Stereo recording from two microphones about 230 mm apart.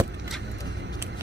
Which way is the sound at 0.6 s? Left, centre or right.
Right.